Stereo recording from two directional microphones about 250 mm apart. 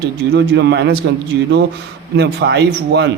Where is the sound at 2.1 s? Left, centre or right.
Right.